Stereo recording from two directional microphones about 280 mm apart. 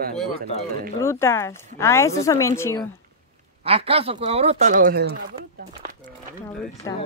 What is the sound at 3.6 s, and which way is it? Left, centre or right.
Speech, right.